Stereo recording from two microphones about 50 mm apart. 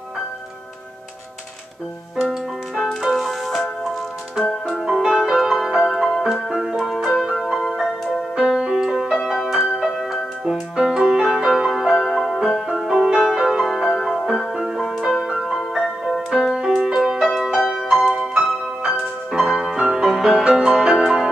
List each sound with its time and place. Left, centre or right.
2.7 s music: centre
8.4 s music: centre
9.1 s music: centre
10.8 s music: centre
18.2 s music: centre